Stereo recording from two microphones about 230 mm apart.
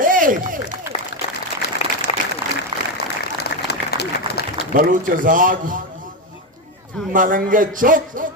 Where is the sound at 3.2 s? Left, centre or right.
Left.